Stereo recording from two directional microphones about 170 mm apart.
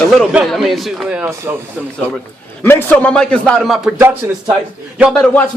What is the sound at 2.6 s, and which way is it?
Music, 10° left (ahead or behind).